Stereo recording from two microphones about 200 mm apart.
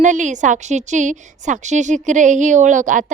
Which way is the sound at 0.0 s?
40° right (ahead or behind).